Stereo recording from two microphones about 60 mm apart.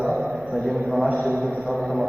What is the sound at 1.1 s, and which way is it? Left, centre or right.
Speech, right.